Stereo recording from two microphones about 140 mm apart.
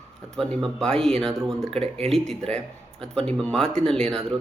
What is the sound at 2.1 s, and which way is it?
Speech, centre (ahead or behind).